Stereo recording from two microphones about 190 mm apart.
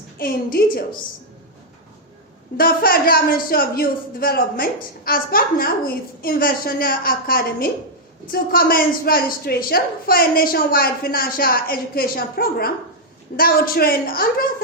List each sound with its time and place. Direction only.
0.2 s a woman's voice: 50° left (ahead or behind)
2.6 s a woman's voice: 50° left (ahead or behind)